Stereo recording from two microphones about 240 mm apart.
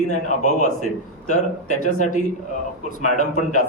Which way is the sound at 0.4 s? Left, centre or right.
Left.